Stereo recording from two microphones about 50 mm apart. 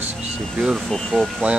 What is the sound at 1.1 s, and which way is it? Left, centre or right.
Speech, centre.